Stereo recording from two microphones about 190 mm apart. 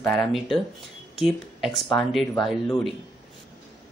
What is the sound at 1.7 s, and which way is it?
Speech, 20° left (ahead or behind).